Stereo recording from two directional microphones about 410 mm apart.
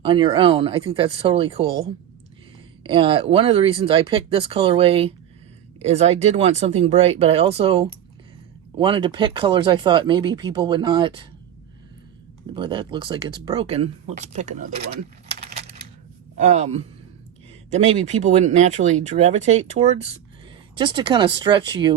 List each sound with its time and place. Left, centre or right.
0.0 s speech: centre
12.5 s speech: centre
15.4 s coin: centre
16.4 s speech: centre